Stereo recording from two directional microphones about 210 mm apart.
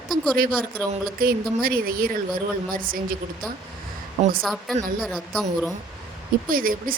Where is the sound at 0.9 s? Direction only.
45° right (ahead or behind).